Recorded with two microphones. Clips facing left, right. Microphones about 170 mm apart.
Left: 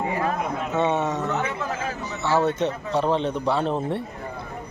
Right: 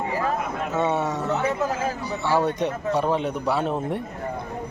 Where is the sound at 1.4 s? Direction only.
40° right (ahead or behind).